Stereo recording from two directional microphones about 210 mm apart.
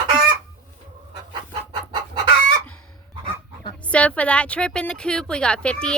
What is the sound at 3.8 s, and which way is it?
A woman's voice, 5° left (ahead or behind).